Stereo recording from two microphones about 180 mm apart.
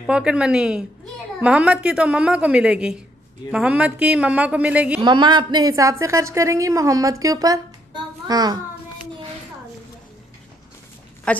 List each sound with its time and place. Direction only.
0.0 s a woman's voice: 5° right (ahead or behind)
5.0 s a woman's voice: 25° right (ahead or behind)
11.3 s a woman's voice: 5° left (ahead or behind)